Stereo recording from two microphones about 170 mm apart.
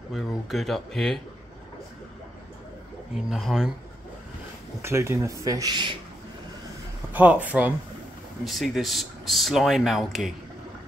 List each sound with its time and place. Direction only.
0.1 s speech: centre (ahead or behind)
3.2 s speech: centre (ahead or behind)
4.8 s speech: 15° right (ahead or behind)
7.1 s a man's voice: 10° right (ahead or behind)